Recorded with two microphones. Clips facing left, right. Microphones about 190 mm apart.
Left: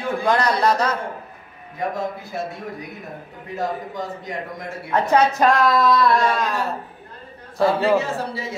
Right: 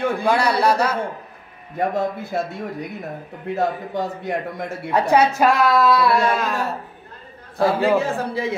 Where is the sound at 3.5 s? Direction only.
65° right (ahead or behind).